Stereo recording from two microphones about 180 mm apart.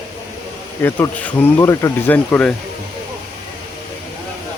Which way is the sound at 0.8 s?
10° left (ahead or behind).